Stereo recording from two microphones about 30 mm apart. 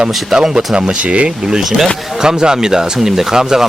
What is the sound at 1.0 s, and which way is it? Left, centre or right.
Speech, right.